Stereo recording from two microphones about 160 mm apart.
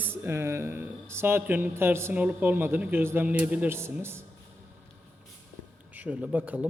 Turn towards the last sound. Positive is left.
turn(degrees=-10)  # may be behind; listen again after turning